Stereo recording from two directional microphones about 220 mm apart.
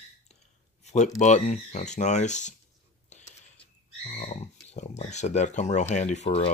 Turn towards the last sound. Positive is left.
turn(degrees=30)  # may be behind; listen again after turning